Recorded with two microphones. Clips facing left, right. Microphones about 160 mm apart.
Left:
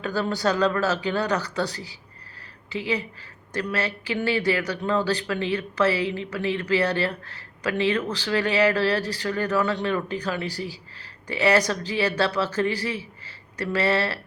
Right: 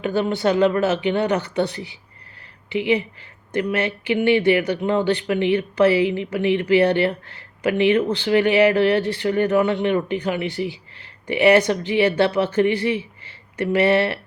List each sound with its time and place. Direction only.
0.0 s speech: 25° right (ahead or behind)